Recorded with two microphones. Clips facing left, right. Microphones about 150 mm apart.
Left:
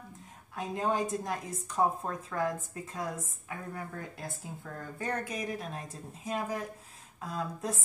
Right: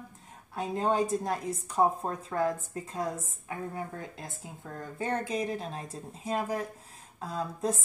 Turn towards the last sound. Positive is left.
turn(degrees=-30)  # may be behind; listen again after turning